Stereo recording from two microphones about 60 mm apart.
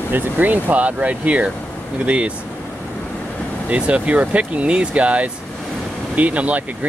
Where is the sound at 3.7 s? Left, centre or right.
Right.